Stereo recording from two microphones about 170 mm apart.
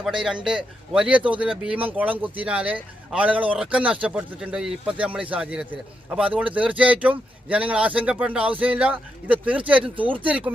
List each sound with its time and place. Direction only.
0.0 s a man's voice: 5° right (ahead or behind)